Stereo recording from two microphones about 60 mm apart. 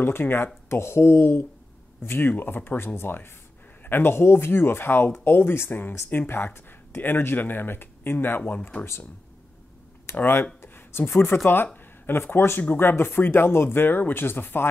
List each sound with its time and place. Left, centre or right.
0.0 s speech: left
10.1 s a sound: left
11.4 s speech: left